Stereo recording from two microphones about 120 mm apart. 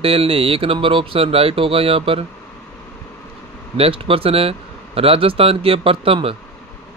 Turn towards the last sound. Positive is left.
turn(degrees=-50)  # may be behind; listen again after turning